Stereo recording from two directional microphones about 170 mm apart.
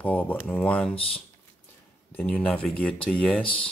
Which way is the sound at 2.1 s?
10° left (ahead or behind).